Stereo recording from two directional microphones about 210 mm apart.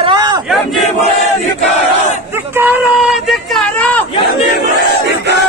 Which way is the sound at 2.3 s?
10° right (ahead or behind).